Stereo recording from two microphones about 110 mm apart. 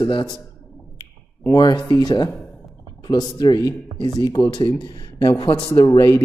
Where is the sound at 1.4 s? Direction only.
35° left (ahead or behind).